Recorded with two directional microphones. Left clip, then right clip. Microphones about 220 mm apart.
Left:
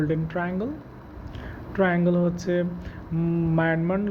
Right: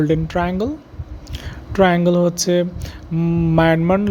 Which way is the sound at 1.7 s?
55° right (ahead or behind).